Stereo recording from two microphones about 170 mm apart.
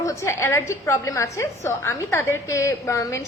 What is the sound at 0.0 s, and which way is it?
A woman's voice, 15° left (ahead or behind).